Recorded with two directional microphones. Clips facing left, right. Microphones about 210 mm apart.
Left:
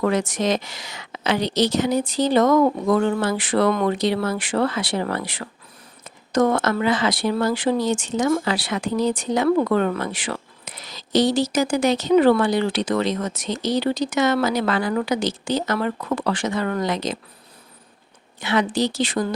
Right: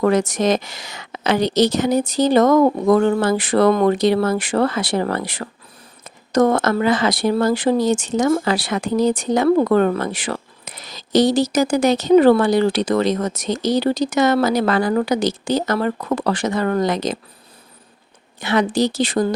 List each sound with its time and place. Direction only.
0.0 s speech: 40° right (ahead or behind)
18.3 s speech: 40° right (ahead or behind)